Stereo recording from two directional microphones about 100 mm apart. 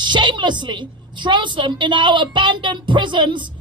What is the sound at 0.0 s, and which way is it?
A woman's voice, 50° right (ahead or behind).